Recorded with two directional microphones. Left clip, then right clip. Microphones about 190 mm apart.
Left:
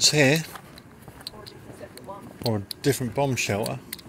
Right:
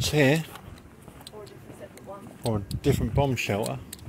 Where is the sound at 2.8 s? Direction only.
5° right (ahead or behind).